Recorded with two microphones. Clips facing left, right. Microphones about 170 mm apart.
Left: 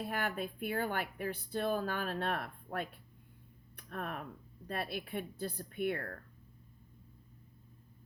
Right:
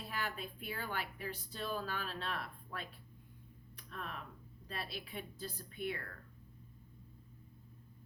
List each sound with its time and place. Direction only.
0.0 s speech: 55° left (ahead or behind)